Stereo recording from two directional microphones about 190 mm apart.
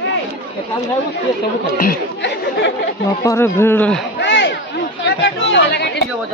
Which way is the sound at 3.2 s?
15° left (ahead or behind).